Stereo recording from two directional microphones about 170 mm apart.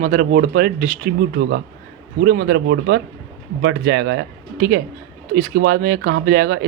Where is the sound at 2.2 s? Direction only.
70° right (ahead or behind).